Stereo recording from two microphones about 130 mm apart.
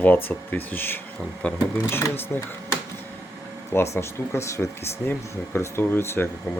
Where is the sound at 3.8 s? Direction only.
20° left (ahead or behind).